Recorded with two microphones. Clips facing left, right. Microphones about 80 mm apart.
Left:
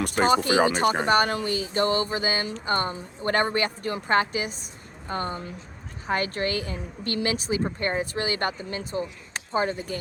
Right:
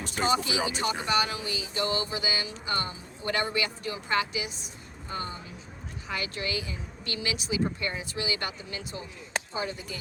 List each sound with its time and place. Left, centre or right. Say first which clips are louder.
0.0 s speech: left 6 dB; left